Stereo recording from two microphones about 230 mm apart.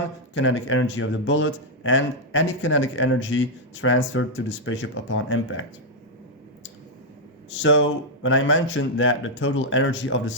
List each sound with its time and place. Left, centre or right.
0.3 s a man's voice: left
7.6 s a man's voice: left